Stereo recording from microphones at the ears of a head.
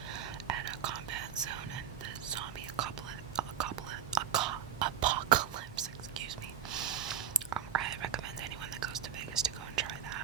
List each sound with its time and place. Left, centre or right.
0.1 s whispering: right